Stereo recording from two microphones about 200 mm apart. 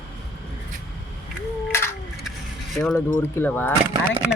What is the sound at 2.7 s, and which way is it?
Speech, centre (ahead or behind).